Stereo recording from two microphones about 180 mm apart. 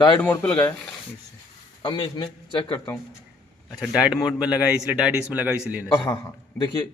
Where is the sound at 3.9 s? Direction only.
5° right (ahead or behind).